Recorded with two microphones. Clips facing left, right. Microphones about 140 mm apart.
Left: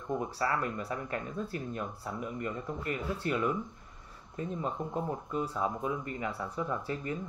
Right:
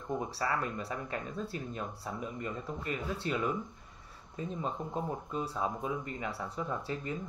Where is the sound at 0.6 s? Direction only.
25° right (ahead or behind).